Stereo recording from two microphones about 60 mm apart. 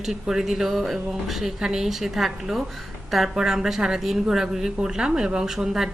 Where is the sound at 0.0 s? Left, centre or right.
Centre.